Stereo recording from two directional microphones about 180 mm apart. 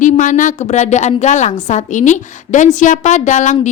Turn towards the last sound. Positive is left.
turn(degrees=45)  # may be behind; listen again after turning